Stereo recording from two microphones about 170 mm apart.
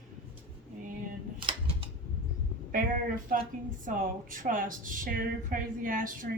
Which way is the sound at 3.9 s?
50° right (ahead or behind).